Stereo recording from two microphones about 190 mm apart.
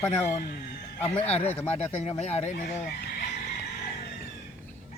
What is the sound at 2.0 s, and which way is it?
Speech, 35° left (ahead or behind).